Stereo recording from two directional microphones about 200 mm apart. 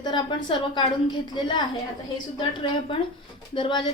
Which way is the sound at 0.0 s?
25° left (ahead or behind).